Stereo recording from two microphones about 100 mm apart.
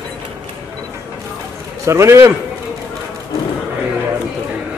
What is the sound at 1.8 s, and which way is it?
Speech, 30° right (ahead or behind).